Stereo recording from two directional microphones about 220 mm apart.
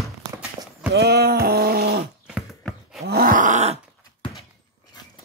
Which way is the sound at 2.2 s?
5° right (ahead or behind).